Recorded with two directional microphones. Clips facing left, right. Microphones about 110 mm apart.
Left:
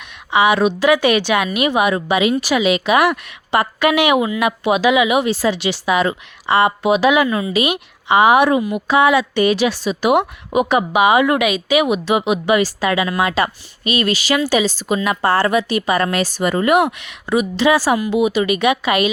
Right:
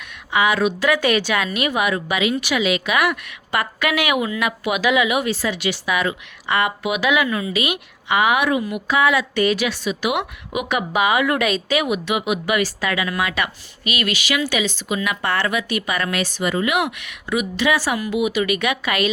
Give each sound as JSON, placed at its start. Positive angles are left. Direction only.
{"t": 0.3, "sound": "a woman's voice", "side_deg": 25}
{"t": 11.3, "sound": "a woman's voice", "side_deg": 10}
{"t": 12.0, "sound": "a woman's voice", "side_deg": 30}
{"t": 17.0, "sound": "a woman's voice", "side_deg": 30}